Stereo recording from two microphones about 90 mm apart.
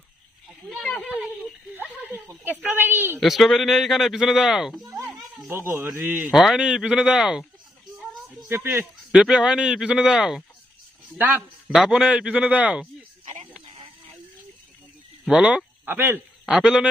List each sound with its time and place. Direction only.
0.8 s a sound: 10° left (ahead or behind)
1.1 s a sound: centre (ahead or behind)
2.6 s a man's voice: 20° right (ahead or behind)
3.2 s speech: centre (ahead or behind)
5.5 s a man's voice: 25° right (ahead or behind)
6.3 s speech: 5° right (ahead or behind)
7.9 s music: centre (ahead or behind)
8.4 s a man's voice: 25° right (ahead or behind)
9.1 s speech: 5° right (ahead or behind)
11.2 s a man's voice: 20° right (ahead or behind)
11.7 s speech: 5° right (ahead or behind)
15.4 s speech: 15° right (ahead or behind)
16.5 s speech: 5° right (ahead or behind)